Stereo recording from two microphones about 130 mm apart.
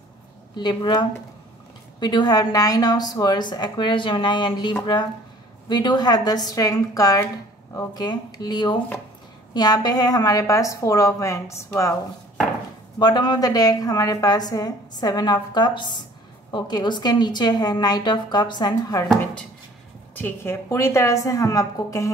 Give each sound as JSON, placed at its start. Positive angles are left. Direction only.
{"t": 0.6, "sound": "a woman's voice", "side_deg": 35}
{"t": 13.0, "sound": "a woman's voice", "side_deg": 35}
{"t": 20.2, "sound": "a woman's voice", "side_deg": 15}